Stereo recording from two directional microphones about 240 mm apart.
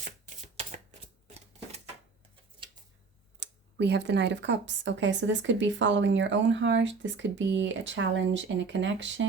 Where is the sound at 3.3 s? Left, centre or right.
Right.